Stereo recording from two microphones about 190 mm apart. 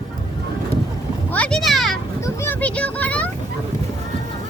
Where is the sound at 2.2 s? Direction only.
15° left (ahead or behind).